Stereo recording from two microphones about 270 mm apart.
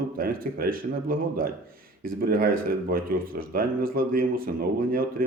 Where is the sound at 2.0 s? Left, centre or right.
Right.